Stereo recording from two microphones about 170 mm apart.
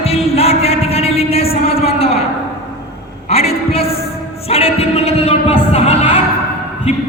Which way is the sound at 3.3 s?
35° left (ahead or behind).